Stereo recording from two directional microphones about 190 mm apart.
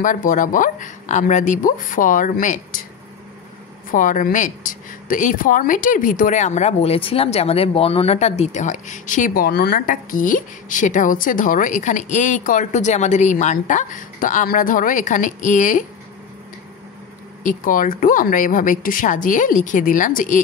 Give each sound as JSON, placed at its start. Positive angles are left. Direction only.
{"t": 0.0, "sound": "speech", "side_deg": 45}
{"t": 3.9, "sound": "speech", "side_deg": 45}
{"t": 17.4, "sound": "speech", "side_deg": 45}